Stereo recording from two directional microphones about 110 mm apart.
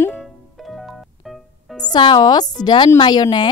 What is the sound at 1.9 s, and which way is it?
Speech, 40° left (ahead or behind).